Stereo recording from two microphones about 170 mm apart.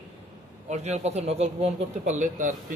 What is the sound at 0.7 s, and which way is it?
Speech, 40° right (ahead or behind).